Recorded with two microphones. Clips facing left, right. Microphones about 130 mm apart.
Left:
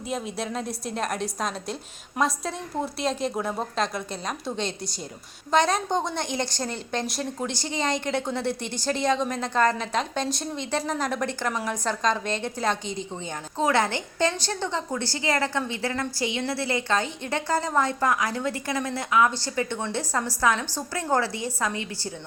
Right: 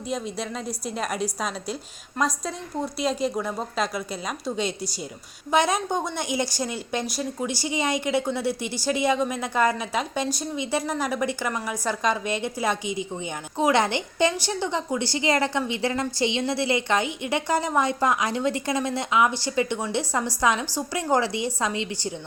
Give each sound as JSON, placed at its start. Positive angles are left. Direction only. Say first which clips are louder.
{"t": 0.1, "sound": "a woman's voice", "louder": "even", "side_deg": 0}